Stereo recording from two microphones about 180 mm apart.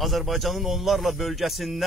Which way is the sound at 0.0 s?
Centre (ahead or behind).